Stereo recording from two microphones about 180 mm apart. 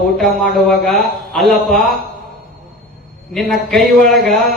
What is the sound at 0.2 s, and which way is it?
A man's voice, centre (ahead or behind).